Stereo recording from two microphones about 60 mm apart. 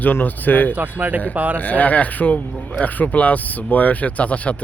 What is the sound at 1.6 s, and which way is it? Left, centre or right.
Speech, left.